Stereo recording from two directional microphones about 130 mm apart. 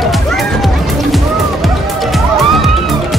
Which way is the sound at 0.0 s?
Centre (ahead or behind).